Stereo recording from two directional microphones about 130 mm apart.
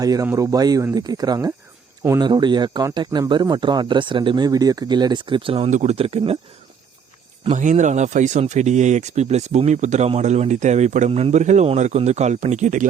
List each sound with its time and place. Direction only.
0.0 s speech: 30° right (ahead or behind); by 5.7 s 45° right (ahead or behind)
5.7 s speech: 55° right (ahead or behind)
7.5 s speech: 70° right (ahead or behind)